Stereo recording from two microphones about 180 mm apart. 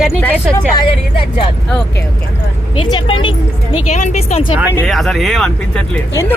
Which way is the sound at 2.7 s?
30° left (ahead or behind).